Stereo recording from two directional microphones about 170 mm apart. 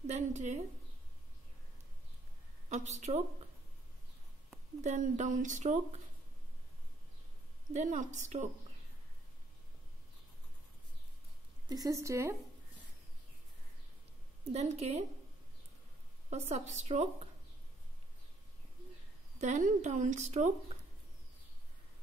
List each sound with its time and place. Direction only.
0.0 s a woman's voice: 40° right (ahead or behind)
2.7 s speech: 45° right (ahead or behind)
4.8 s speech: 45° right (ahead or behind)
7.7 s speech: 45° right (ahead or behind)
11.6 s speech: 20° right (ahead or behind)
14.4 s a woman's voice: 40° right (ahead or behind)
16.3 s speech: 45° right (ahead or behind)
19.3 s speech: 45° right (ahead or behind)